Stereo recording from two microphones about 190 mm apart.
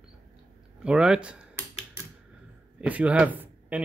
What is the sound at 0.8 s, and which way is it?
Speech, 5° right (ahead or behind).